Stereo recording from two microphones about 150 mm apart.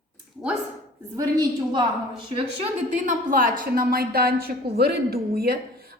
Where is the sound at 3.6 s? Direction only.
85° right.